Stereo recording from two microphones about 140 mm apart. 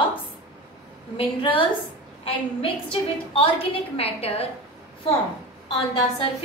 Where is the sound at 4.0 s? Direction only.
45° left (ahead or behind).